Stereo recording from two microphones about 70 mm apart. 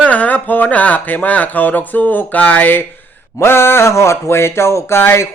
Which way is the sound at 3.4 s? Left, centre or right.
Left.